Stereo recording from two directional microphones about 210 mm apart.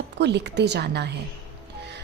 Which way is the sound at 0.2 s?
55° right (ahead or behind).